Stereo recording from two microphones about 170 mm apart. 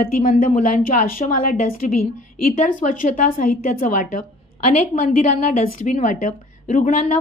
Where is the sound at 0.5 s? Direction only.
45° left (ahead or behind).